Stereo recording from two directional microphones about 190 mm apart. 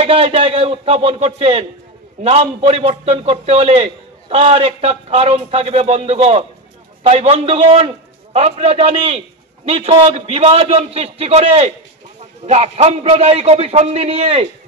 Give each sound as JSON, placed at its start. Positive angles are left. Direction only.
{"t": 0.0, "sound": "a man's voice", "side_deg": -30}